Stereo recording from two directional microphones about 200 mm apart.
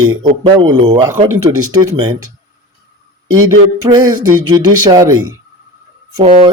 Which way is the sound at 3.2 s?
90° right.